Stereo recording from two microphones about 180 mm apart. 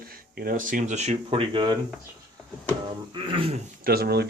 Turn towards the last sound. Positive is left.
turn(degrees=-60)  # may be behind; listen again after turning